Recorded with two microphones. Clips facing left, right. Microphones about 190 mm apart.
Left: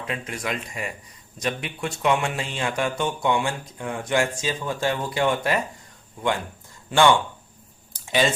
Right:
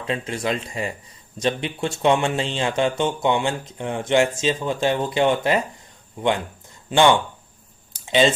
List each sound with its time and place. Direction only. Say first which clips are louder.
0.1 s speech: right 6 dB; 30° right (ahead or behind)
6.9 s speech: right 2 dB; 20° right (ahead or behind)
8.0 s typing: right 4 dB; 20° right (ahead or behind)